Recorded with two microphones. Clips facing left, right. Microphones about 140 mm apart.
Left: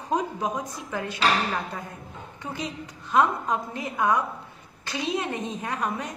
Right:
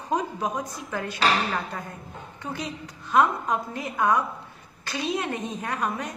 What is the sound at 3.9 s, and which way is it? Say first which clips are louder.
Speech: right 1 dB; 5° left (ahead or behind).